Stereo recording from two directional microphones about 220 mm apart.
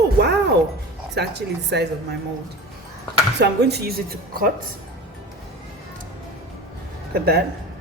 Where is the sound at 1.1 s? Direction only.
50° right (ahead or behind).